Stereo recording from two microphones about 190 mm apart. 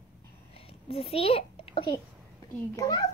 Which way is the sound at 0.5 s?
30° left (ahead or behind).